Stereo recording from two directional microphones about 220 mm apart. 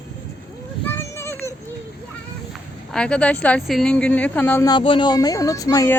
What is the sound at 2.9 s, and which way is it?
Speech, 5° left (ahead or behind).